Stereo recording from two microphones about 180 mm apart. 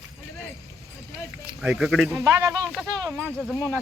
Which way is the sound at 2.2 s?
15° right (ahead or behind).